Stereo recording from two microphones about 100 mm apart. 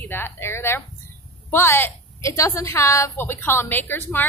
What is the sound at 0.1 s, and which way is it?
A woman's voice, 25° left (ahead or behind).